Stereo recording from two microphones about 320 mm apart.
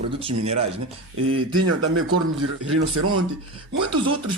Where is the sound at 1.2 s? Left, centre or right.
Right.